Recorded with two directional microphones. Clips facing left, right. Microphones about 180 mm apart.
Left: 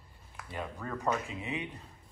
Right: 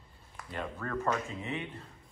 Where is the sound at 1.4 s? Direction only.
15° left (ahead or behind).